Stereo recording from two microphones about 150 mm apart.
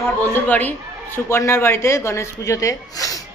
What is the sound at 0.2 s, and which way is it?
Speech, 10° left (ahead or behind).